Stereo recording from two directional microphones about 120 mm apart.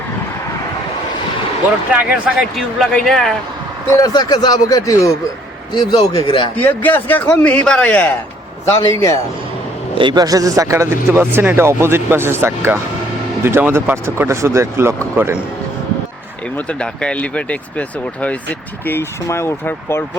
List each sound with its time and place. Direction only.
1.9 s speech: 10° right (ahead or behind)
3.9 s speech: 30° left (ahead or behind)
6.6 s speech: 15° left (ahead or behind)
8.7 s a man's voice: 25° left (ahead or behind)
10.0 s a man's voice: 35° right (ahead or behind); by 15.4 s 15° right (ahead or behind)
16.6 s speech: 10° left (ahead or behind)